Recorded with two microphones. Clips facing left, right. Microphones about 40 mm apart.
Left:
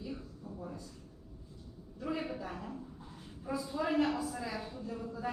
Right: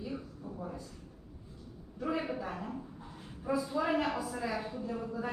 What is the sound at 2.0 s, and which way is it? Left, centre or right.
Speech, centre.